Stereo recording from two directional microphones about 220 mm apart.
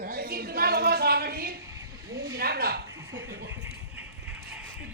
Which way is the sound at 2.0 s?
15° right (ahead or behind).